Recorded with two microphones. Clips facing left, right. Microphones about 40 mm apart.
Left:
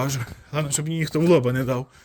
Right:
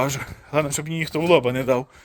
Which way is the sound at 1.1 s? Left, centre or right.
Right.